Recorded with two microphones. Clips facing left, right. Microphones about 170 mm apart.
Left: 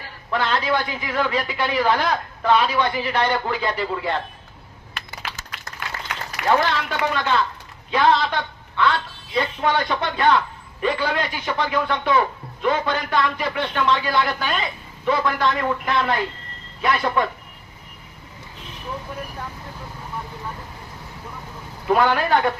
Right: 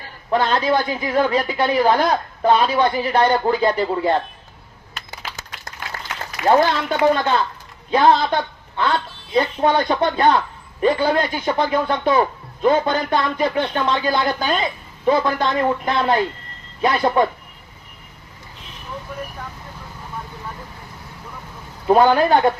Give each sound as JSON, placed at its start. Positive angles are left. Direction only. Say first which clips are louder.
{"t": 0.3, "sound": "a woman's voice", "louder": "right 4 dB", "side_deg": -35}
{"t": 6.5, "sound": "a woman's voice", "louder": "right 4 dB", "side_deg": -35}
{"t": 21.8, "sound": "a woman's voice", "louder": "right 5 dB", "side_deg": -30}